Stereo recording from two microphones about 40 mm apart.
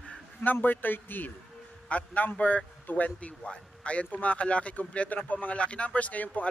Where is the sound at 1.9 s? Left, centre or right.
Left.